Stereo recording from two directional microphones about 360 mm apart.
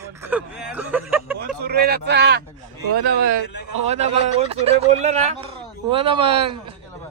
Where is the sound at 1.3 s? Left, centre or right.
Right.